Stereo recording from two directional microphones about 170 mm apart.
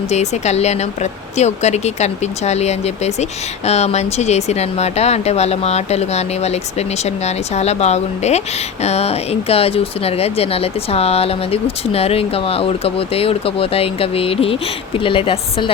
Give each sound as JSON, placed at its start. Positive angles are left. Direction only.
{"t": 0.1, "sound": "speech", "side_deg": 40}